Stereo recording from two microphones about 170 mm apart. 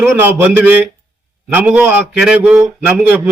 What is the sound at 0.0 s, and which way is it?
A man's voice, 10° right (ahead or behind).